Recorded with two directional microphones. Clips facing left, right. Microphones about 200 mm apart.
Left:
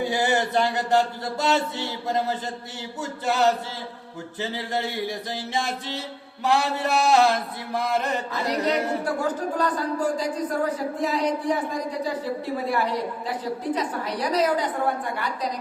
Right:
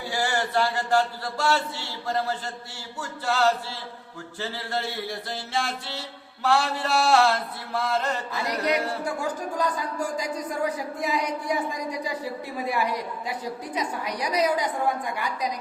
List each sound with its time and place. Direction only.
0.0 s a sound: 20° left (ahead or behind)
4.4 s chant: 20° left (ahead or behind)
9.2 s a woman's voice: 10° right (ahead or behind)